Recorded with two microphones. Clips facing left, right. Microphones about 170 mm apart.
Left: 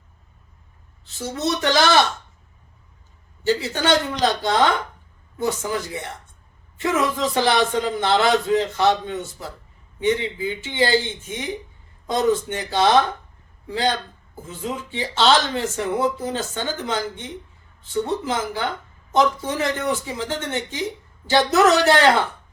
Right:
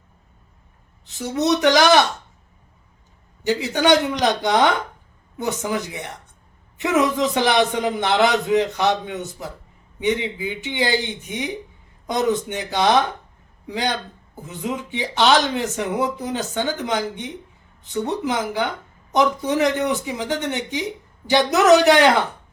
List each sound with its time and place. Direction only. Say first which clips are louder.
1.0 s speech: right 4 dB; 15° right (ahead or behind)
3.4 s speech: right 2 dB; 15° right (ahead or behind)